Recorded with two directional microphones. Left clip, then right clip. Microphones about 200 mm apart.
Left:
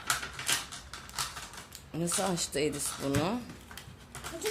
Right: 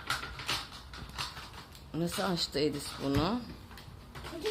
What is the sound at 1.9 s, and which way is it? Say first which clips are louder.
Speech: left 1 dB; 15° left (ahead or behind).